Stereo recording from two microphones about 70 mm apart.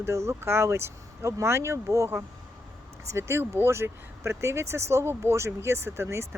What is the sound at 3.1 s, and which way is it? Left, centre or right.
Speech, right.